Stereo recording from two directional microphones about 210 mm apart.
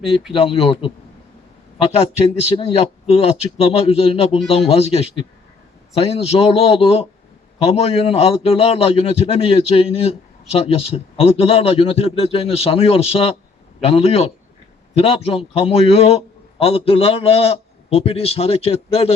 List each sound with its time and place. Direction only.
0.3 s a man's voice: 25° left (ahead or behind)